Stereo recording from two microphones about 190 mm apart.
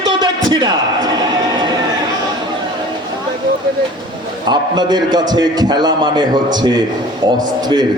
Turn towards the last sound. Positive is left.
turn(degrees=-20)  # may be behind; listen again after turning